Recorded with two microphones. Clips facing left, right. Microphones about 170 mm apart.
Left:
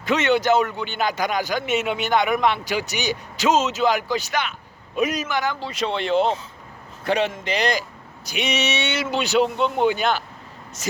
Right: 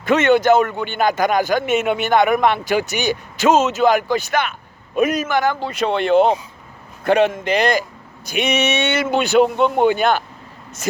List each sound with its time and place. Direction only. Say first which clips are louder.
0.0 s a man's voice: right 5 dB; 50° right (ahead or behind)